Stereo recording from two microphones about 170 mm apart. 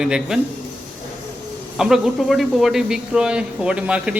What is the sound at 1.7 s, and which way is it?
Speech, 5° right (ahead or behind).